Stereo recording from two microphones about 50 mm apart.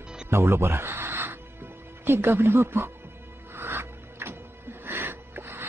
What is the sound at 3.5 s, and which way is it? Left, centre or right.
Music, right.